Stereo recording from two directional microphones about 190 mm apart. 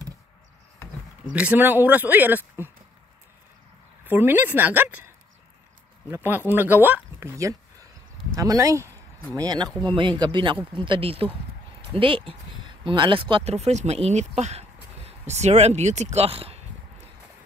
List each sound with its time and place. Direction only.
1.3 s speech: 10° right (ahead or behind)
4.0 s speech: 10° right (ahead or behind); by 16.6 s 30° right (ahead or behind)